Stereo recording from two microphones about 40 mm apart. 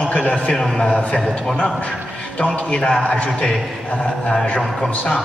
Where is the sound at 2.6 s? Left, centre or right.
Left.